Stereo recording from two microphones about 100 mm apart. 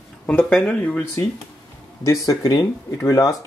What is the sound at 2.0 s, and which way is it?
Speech, 35° left (ahead or behind).